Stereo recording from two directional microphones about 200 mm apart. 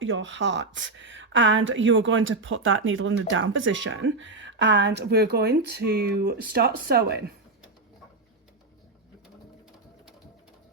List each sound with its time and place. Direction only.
0.0 s speech: 70° right (ahead or behind); by 7.3 s 55° right (ahead or behind)